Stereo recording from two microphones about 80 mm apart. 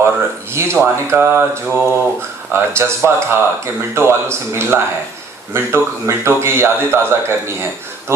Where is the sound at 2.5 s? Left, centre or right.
Right.